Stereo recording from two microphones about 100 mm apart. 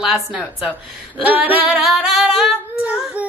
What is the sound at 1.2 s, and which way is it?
Female singing, 15° right (ahead or behind).